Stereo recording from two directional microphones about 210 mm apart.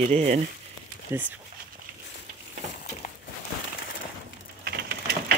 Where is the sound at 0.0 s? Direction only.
35° right (ahead or behind).